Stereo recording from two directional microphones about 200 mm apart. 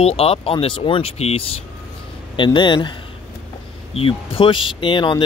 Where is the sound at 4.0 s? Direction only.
25° left (ahead or behind).